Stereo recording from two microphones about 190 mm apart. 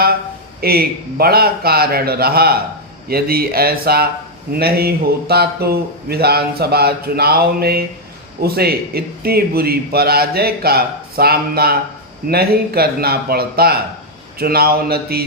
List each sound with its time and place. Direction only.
0.6 s a man's voice: 55° right (ahead or behind)